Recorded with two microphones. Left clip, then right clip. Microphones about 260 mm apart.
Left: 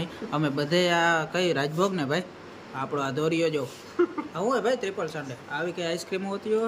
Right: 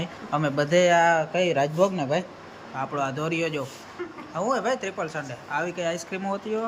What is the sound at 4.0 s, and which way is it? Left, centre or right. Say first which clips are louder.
Speech: left 12 dB; left.